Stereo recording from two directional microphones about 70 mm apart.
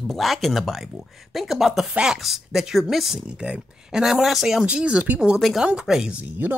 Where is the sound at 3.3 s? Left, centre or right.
Centre.